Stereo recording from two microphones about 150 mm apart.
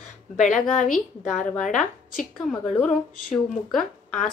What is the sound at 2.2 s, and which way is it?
A woman's voice, centre (ahead or behind).